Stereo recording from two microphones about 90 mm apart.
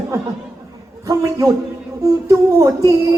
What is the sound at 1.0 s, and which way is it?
A man's voice, 40° right (ahead or behind).